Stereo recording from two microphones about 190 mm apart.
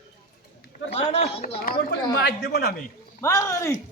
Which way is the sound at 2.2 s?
60° left (ahead or behind).